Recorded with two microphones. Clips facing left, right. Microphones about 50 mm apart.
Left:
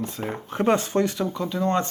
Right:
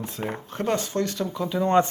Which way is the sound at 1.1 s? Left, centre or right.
Centre.